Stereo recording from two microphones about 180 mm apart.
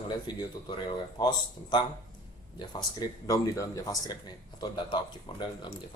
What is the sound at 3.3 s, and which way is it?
Speech, 20° left (ahead or behind).